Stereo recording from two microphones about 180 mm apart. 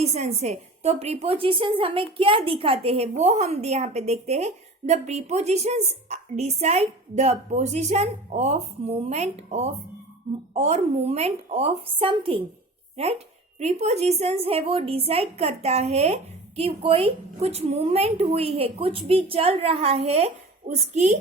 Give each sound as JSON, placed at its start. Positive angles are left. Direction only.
{"t": 0.0, "sound": "a woman's voice", "side_deg": -35}